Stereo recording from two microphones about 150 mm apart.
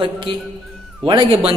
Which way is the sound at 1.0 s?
35° right (ahead or behind).